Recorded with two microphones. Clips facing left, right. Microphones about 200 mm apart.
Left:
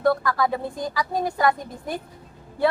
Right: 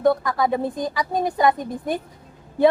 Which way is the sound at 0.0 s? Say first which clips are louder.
Right 2 dB; 20° right (ahead or behind).